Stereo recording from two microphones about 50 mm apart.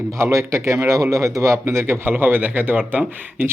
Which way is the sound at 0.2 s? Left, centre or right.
Right.